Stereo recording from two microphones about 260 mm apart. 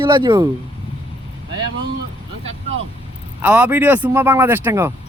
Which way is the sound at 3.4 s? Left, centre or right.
Centre.